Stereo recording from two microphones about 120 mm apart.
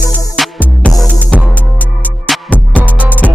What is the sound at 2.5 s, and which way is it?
Music, 10° left (ahead or behind).